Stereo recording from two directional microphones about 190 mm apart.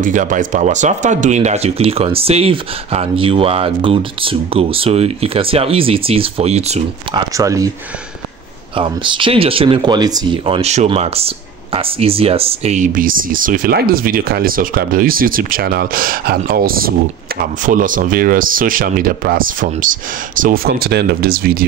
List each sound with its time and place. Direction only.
0.0 s speech: 45° right (ahead or behind)
7.2 s speech: 15° right (ahead or behind)
8.7 s speech: 25° right (ahead or behind); by 21.6 s 50° right (ahead or behind)